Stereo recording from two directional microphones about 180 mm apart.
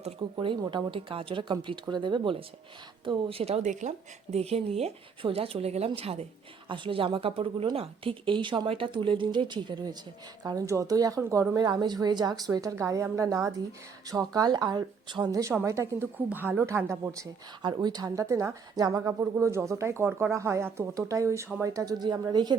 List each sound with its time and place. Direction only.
0.0 s speech: 25° right (ahead or behind)